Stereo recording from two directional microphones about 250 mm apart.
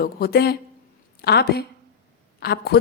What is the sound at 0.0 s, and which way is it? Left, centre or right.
Speech, left.